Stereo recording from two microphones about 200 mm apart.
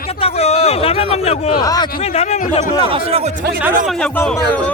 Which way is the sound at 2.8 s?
30° right (ahead or behind).